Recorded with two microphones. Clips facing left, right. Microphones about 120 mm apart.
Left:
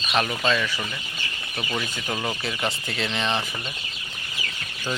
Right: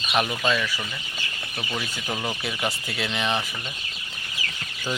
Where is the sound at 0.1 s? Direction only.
5° right (ahead or behind).